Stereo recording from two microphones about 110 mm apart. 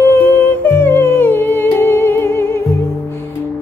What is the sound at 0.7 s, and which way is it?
Humming, 20° left (ahead or behind).